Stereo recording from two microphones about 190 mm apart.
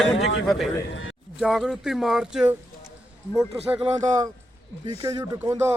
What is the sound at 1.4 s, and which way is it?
Speech, centre (ahead or behind).